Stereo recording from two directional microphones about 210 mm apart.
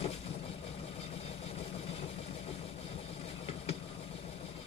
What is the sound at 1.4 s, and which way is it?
Vehicle, 30° left (ahead or behind).